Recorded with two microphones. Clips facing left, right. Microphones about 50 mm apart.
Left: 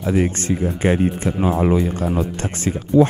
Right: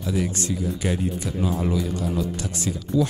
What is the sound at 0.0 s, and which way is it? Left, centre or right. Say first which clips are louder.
Speech: left 6 dB; left.